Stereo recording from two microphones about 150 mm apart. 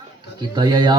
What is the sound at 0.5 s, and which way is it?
Speech, 30° right (ahead or behind).